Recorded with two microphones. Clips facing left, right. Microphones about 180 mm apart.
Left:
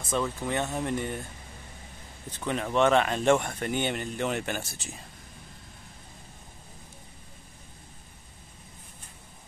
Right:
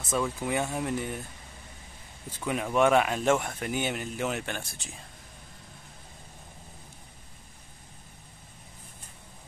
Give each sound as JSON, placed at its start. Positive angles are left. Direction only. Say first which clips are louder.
{"t": 0.1, "sound": "speech", "louder": "even", "side_deg": -10}
{"t": 2.3, "sound": "speech", "louder": "even", "side_deg": -10}